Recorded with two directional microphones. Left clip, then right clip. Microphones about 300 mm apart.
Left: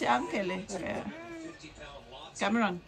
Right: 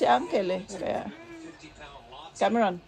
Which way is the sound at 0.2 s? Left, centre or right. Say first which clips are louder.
Right 6 dB; centre.